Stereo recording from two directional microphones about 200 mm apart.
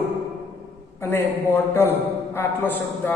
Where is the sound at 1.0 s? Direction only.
10° left (ahead or behind).